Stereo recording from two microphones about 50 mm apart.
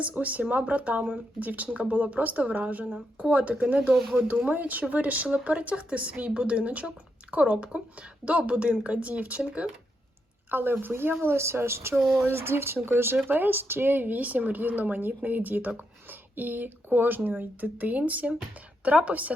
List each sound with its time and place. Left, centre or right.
0.0 s a woman's voice: right
10.5 s a woman's voice: right
13.2 s a woman's voice: right